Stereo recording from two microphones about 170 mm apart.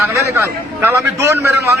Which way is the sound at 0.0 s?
15° right (ahead or behind).